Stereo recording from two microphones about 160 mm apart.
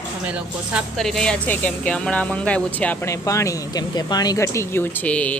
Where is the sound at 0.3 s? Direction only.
5° right (ahead or behind).